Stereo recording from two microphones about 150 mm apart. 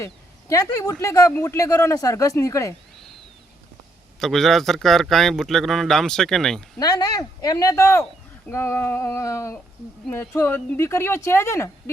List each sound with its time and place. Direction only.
0.0 s speech: 20° left (ahead or behind)
4.2 s a man's voice: centre (ahead or behind)
6.7 s speech: 25° left (ahead or behind)